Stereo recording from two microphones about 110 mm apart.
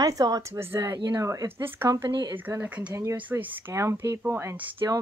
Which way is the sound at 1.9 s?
30° right (ahead or behind).